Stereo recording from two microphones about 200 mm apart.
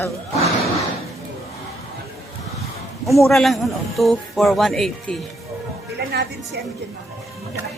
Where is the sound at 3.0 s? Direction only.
Centre (ahead or behind).